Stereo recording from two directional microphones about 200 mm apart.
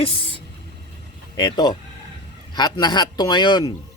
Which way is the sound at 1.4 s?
20° left (ahead or behind).